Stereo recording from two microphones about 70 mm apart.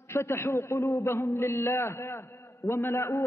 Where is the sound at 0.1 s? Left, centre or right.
Left.